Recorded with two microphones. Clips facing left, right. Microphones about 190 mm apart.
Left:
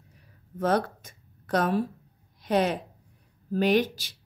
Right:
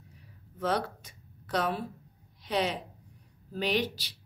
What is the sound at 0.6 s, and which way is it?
Speech, 50° left (ahead or behind).